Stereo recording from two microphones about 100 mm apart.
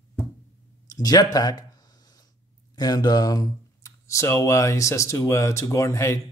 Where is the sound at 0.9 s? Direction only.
40° left (ahead or behind).